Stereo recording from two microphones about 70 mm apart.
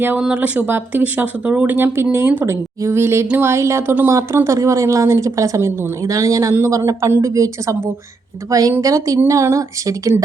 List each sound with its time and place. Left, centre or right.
0.2 s speech: centre
2.5 s speech: right
6.5 s speech: right